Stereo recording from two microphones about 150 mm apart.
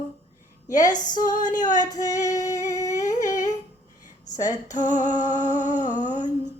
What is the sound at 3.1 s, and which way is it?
Humming, 20° left (ahead or behind).